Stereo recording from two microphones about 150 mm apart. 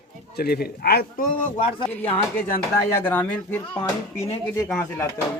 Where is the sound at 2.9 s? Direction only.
10° left (ahead or behind).